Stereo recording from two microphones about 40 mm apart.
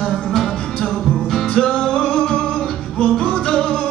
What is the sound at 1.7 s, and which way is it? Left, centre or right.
Music, left.